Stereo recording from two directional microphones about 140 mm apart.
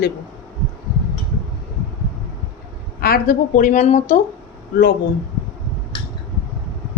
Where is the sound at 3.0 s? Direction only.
90° left; by 4.2 s 60° left (ahead or behind).